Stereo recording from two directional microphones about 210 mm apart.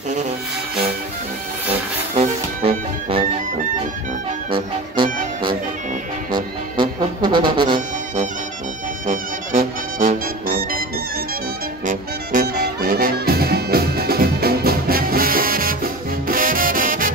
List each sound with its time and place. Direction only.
2.1 s music: 25° right (ahead or behind)
6.3 s music: 20° right (ahead or behind)
9.0 s music: 40° right (ahead or behind)
11.8 s music: 40° right (ahead or behind)